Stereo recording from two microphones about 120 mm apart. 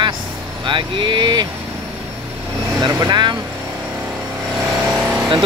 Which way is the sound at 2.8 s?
35° right (ahead or behind).